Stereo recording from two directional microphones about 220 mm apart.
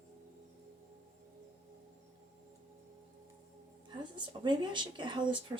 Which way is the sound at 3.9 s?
20° right (ahead or behind).